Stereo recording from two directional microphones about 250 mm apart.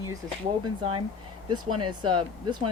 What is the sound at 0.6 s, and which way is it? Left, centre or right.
Speech, right.